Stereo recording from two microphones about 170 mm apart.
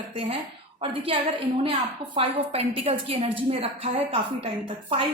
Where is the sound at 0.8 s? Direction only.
30° right (ahead or behind).